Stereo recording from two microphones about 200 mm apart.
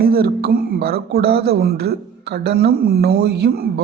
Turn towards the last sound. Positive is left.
turn(degrees=-50)  # may be behind; listen again after turning